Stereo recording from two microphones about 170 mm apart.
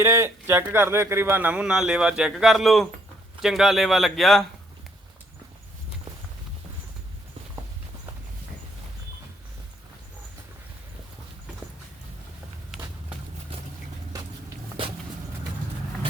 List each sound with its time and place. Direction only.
0.0 s a man's voice: 15° right (ahead or behind); by 4.4 s centre (ahead or behind)
14.1 s walk: 20° right (ahead or behind)